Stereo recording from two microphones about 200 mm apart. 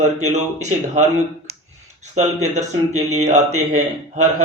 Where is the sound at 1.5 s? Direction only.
50° right (ahead or behind).